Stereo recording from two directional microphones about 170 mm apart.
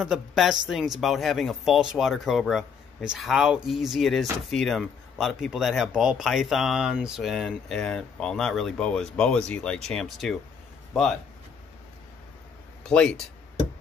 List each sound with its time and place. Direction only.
0.0 s speech: 5° right (ahead or behind)
12.8 s speech: 5° left (ahead or behind)